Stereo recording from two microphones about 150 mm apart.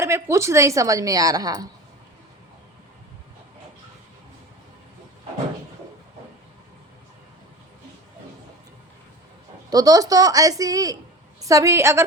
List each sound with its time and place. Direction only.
0.0 s a woman's voice: 20° right (ahead or behind)
9.6 s a woman's voice: 25° right (ahead or behind)